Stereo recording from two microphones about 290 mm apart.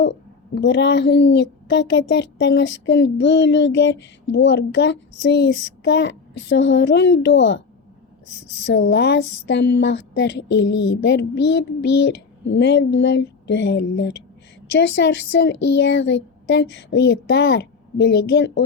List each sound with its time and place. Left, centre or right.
0.0 s a woman's voice: left
8.6 s a woman's voice: left
15.5 s speech: left
15.8 s a woman's voice: left